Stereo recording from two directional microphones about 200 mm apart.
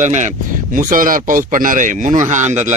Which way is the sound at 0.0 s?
35° right (ahead or behind).